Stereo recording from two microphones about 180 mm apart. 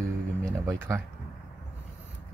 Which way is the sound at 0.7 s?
15° right (ahead or behind).